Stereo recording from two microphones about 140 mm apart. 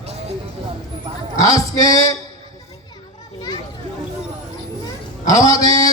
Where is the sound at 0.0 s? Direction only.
50° right (ahead or behind).